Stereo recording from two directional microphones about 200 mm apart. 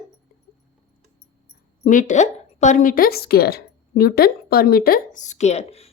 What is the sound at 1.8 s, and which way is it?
A woman's voice, 40° left (ahead or behind).